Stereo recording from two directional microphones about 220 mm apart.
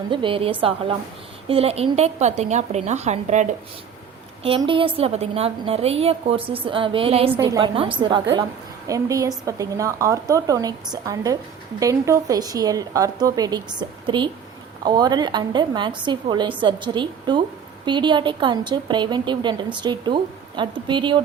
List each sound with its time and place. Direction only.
0.1 s a woman's voice: 25° right (ahead or behind)
7.3 s a woman's voice: 15° right (ahead or behind)